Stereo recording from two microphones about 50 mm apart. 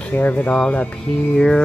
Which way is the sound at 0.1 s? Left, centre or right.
Left.